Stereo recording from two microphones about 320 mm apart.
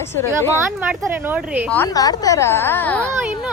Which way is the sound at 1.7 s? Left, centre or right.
Centre.